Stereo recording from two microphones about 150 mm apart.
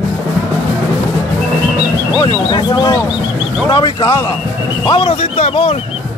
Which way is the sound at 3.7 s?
35° left (ahead or behind).